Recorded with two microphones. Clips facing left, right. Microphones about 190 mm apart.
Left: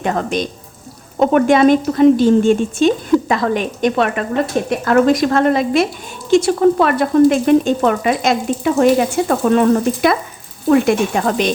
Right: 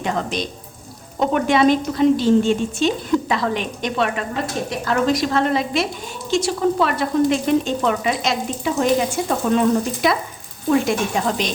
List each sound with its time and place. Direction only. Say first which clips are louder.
0.0 s frying: left 5 dB; 50° left (ahead or behind)
10.7 s speech: left 5 dB; 55° left (ahead or behind)